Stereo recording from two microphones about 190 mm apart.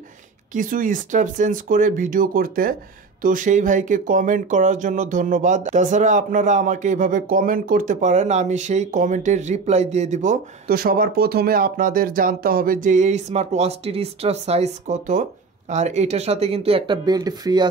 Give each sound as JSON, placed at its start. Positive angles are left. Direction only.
{"t": 0.5, "sound": "speech", "side_deg": -45}